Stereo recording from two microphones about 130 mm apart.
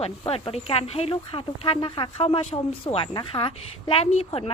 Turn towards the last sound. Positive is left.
turn(degrees=50)  # may be behind; listen again after turning